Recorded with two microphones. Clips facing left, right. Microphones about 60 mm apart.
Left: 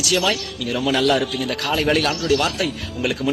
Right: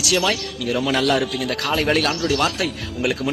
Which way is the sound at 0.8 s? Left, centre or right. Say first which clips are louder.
Left 2 dB; right.